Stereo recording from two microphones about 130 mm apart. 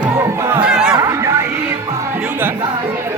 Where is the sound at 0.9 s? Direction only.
25° right (ahead or behind).